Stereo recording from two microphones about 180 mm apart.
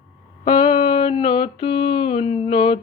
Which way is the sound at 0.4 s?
30° left (ahead or behind).